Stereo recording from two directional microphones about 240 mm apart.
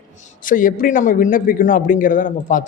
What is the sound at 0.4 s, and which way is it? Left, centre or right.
A man's voice, left.